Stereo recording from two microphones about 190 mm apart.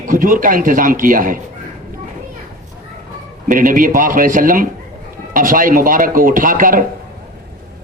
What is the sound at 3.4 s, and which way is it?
A man's voice, 45° right (ahead or behind).